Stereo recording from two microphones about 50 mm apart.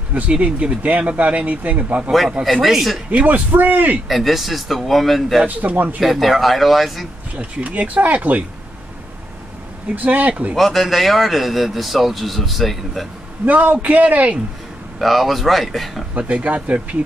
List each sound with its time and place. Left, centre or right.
0.1 s speech: right
2.4 s a man's voice: centre
3.1 s speech: right
4.1 s a man's voice: centre
5.5 s speech: right
5.9 s a man's voice: centre
7.3 s speech: right
9.9 s speech: right
10.5 s a man's voice: centre
13.5 s speech: right
15.0 s a man's voice: centre
16.2 s speech: right